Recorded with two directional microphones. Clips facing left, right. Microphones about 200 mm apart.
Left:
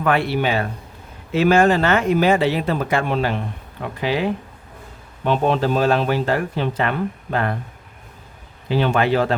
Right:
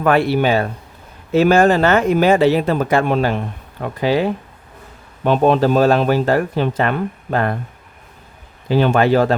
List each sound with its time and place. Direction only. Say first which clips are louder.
0.0 s speech: right 4 dB; 40° right (ahead or behind)
8.7 s speech: right 4 dB; 45° right (ahead or behind)